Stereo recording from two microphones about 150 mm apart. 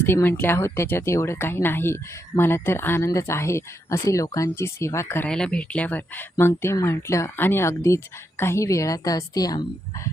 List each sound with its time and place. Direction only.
0.0 s speech: 15° left (ahead or behind)